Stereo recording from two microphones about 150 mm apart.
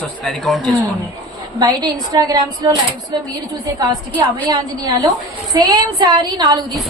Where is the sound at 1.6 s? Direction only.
25° right (ahead or behind).